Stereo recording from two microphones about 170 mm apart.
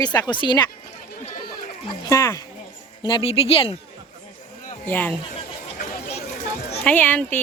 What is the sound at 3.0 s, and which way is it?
Speech, 30° left (ahead or behind).